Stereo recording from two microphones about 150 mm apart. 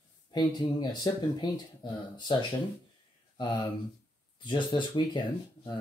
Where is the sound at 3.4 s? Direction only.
30° left (ahead or behind).